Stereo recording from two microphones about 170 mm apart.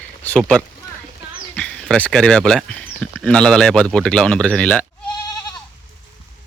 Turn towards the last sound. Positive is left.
turn(degrees=5)  # may be behind; listen again after turning